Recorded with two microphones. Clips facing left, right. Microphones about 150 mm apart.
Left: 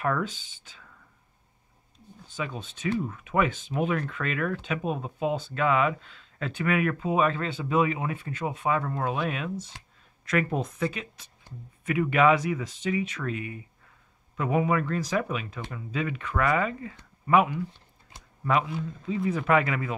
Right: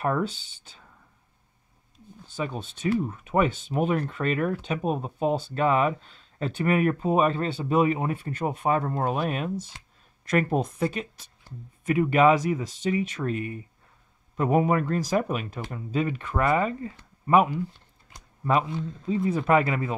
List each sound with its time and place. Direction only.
0.0 s speech: 30° right (ahead or behind)
2.3 s speech: 35° right (ahead or behind)